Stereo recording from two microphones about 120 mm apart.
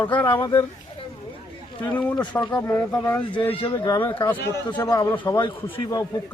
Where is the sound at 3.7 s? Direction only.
35° left (ahead or behind).